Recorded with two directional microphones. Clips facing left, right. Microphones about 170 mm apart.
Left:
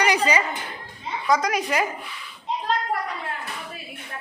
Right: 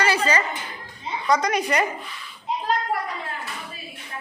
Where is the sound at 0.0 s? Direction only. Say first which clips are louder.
Left 1 dB; 15° left (ahead or behind).